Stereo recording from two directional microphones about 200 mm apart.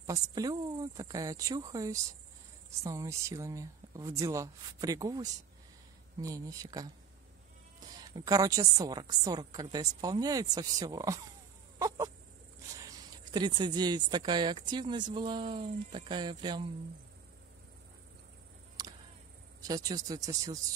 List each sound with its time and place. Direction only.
0.0 s speech: 20° right (ahead or behind)
8.1 s speech: 15° right (ahead or behind)
12.8 s speech: 20° right (ahead or behind)
18.8 s a sound: 20° right (ahead or behind)
19.6 s speech: 15° right (ahead or behind)